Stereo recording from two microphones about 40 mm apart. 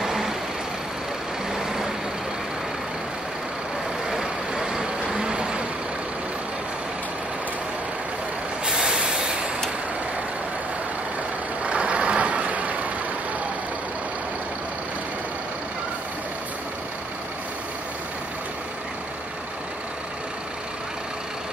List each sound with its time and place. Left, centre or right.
0.0 s vehicle: centre
1.5 s vehicle: centre
4.1 s vehicle: centre
8.6 s vehicle: centre
11.6 s vehicle: right